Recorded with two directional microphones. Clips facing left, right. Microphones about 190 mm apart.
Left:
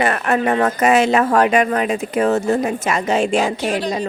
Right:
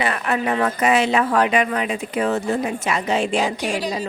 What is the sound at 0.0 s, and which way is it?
Speech, 45° left (ahead or behind).